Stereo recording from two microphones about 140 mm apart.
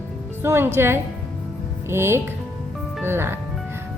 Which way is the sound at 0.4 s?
15° right (ahead or behind).